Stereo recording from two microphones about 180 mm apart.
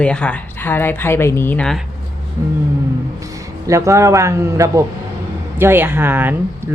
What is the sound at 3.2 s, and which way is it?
Speech, 20° right (ahead or behind).